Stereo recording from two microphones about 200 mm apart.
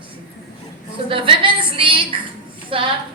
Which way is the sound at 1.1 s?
25° right (ahead or behind).